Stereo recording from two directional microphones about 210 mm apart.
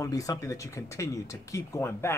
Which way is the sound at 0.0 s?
15° left (ahead or behind).